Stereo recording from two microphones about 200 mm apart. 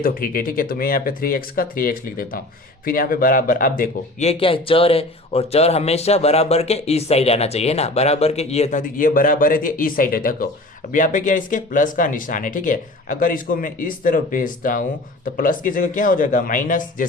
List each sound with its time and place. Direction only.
0.0 s speech: 45° left (ahead or behind)
4.3 s speech: 25° left (ahead or behind); by 17.1 s 40° left (ahead or behind)